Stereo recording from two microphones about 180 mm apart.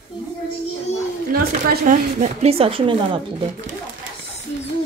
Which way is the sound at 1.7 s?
50° right (ahead or behind).